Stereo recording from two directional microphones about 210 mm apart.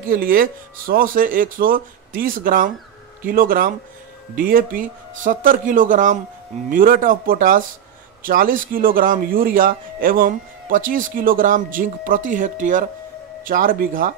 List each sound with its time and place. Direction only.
0.1 s speech: 45° right (ahead or behind)